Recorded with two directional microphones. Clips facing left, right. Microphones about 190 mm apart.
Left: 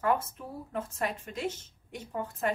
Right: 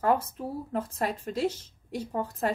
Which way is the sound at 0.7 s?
35° right (ahead or behind).